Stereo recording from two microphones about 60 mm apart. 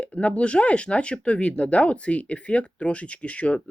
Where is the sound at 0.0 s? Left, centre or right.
Left.